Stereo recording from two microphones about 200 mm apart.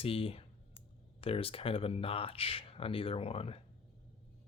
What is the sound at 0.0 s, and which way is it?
Clicking, 25° left (ahead or behind).